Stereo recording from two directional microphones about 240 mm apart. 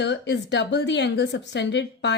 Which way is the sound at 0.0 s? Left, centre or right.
Left.